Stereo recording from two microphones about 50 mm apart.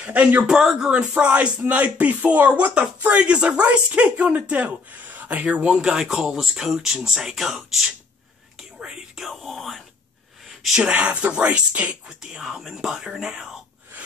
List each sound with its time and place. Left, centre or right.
0.0 s a man's voice: right
0.7 s speech: centre; by 5.7 s right
5.7 s speech: centre
9.1 s speech: centre
10.9 s speech: right
12.2 s speech: centre